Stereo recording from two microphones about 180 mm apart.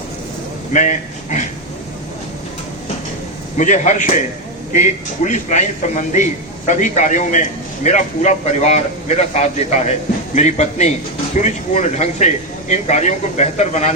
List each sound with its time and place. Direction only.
0.7 s speech: 45° left (ahead or behind)
3.6 s a man's voice: 45° left (ahead or behind)